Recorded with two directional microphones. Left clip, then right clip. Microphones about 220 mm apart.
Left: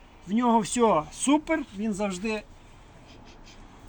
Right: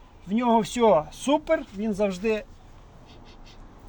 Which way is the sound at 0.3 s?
50° right (ahead or behind).